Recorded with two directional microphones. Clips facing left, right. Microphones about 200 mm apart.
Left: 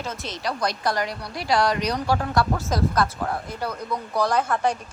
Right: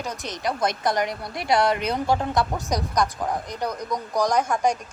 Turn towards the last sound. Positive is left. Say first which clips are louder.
# right 1 dB
turn(degrees=-10)  # may be behind; listen again after turning